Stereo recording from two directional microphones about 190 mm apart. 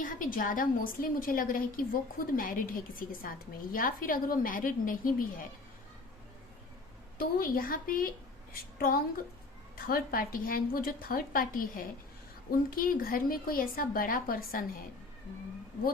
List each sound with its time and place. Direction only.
0.0 s a woman's voice: 45° left (ahead or behind)
7.2 s a woman's voice: 50° left (ahead or behind)
9.7 s a woman's voice: 50° left (ahead or behind)